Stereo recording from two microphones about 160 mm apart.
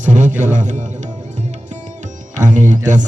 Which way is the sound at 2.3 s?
50° right (ahead or behind).